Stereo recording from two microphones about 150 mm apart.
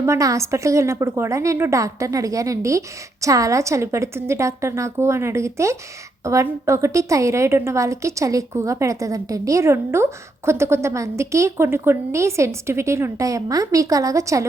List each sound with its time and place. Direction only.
0.0 s a woman's voice: 20° right (ahead or behind)